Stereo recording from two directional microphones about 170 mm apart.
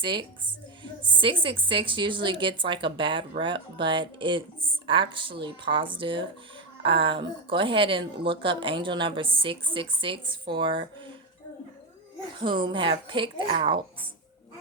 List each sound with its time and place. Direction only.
0.0 s a woman's voice: 30° right (ahead or behind)
12.4 s a woman's voice: 30° right (ahead or behind)